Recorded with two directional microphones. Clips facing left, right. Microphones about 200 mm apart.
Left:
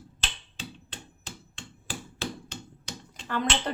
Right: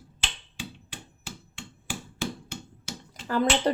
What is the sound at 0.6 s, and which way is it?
Hammer, 10° right (ahead or behind).